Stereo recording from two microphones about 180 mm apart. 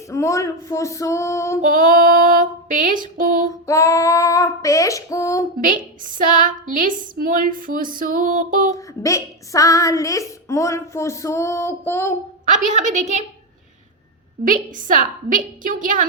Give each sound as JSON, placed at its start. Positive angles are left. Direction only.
{"t": 0.1, "sound": "speech", "side_deg": 15}
{"t": 1.6, "sound": "a woman's voice", "side_deg": -50}
{"t": 3.7, "sound": "speech", "side_deg": 15}
{"t": 5.5, "sound": "a woman's voice", "side_deg": -50}
{"t": 8.7, "sound": "speech", "side_deg": 20}
{"t": 12.5, "sound": "a woman's voice", "side_deg": -45}
{"t": 14.4, "sound": "a woman's voice", "side_deg": -45}